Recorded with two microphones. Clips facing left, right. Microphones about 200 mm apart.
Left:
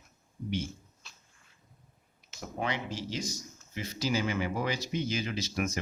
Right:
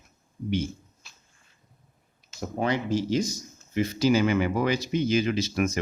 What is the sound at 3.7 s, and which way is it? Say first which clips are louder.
Speech: right 10 dB; 65° right (ahead or behind).